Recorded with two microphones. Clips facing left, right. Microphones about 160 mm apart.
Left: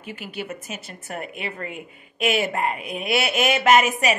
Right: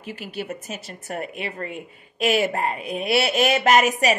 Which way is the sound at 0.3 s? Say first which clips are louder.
Right 1 dB; 40° right (ahead or behind).